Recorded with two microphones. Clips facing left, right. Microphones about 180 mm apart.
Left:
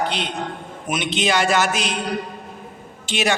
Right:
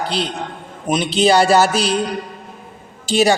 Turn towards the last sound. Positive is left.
turn(degrees=-35)  # may be behind; listen again after turning